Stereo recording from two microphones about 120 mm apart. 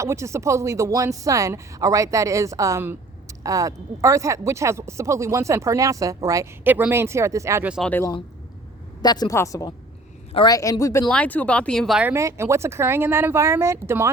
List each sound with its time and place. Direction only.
0.0 s speech: 25° right (ahead or behind)
6.7 s speech: 15° right (ahead or behind)
7.8 s speech: 10° left (ahead or behind)
9.0 s a woman's voice: 35° left (ahead or behind)
11.1 s speech: 10° left (ahead or behind)
12.1 s speech: 25° right (ahead or behind)